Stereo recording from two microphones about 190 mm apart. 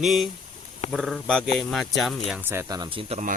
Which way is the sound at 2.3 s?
10° right (ahead or behind).